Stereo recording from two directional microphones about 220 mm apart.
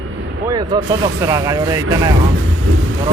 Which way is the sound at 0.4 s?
15° right (ahead or behind).